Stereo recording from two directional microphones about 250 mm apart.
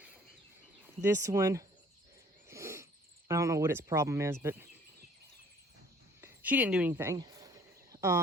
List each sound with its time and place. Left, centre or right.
0.9 s speech: centre
2.5 s a sound: centre
3.2 s speech: centre
6.2 s speech: centre
7.9 s cricket: centre